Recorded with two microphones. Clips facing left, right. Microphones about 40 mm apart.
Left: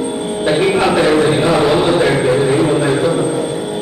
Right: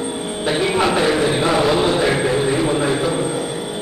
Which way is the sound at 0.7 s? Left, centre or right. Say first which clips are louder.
Left 4 dB; centre.